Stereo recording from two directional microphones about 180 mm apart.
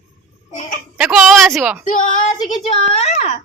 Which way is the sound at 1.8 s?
45° left (ahead or behind).